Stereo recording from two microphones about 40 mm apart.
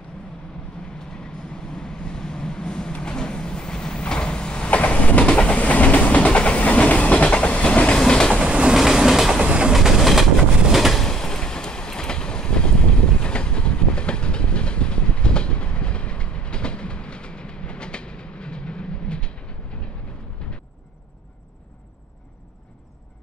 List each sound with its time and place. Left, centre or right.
1.1 s vehicle: centre
4.6 s train: left
8.5 s train: right
8.7 s train: centre
9.4 s train: right
9.8 s train: centre
11.0 s train: centre
20.4 s a sound: left